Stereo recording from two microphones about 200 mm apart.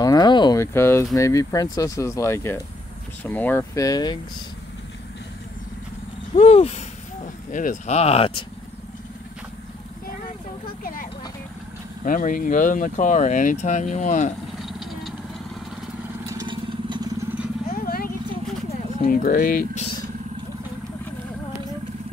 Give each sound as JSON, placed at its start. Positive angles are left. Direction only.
{"t": 0.0, "sound": "speech", "side_deg": 20}
{"t": 6.3, "sound": "speech", "side_deg": 30}
{"t": 10.8, "sound": "vehicle", "side_deg": 45}
{"t": 12.0, "sound": "speech", "side_deg": 45}
{"t": 14.6, "sound": "vehicle", "side_deg": 0}
{"t": 16.3, "sound": "vehicle", "side_deg": -20}
{"t": 17.6, "sound": "vehicle", "side_deg": 45}
{"t": 18.7, "sound": "speech", "side_deg": 40}